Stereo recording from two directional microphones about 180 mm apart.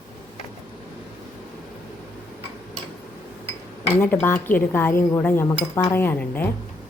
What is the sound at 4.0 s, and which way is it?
Speech, 10° left (ahead or behind).